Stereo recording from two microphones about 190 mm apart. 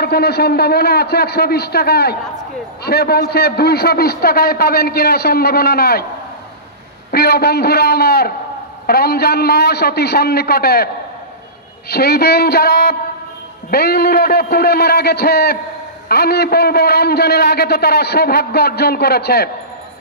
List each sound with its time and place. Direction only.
0.0 s a man's voice: 55° left (ahead or behind)
7.1 s a man's voice: 55° left (ahead or behind)
11.9 s a man's voice: 55° left (ahead or behind)